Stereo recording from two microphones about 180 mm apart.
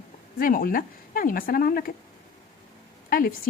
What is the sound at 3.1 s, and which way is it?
Speech, 50° left (ahead or behind).